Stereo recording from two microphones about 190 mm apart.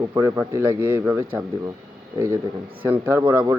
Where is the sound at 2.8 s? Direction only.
10° right (ahead or behind).